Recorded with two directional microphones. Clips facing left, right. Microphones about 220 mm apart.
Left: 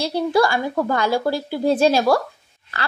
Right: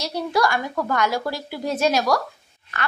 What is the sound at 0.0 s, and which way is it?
A woman's voice, 30° left (ahead or behind).